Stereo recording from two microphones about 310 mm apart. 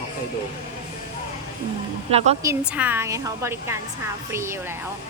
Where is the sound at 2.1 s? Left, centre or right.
Centre.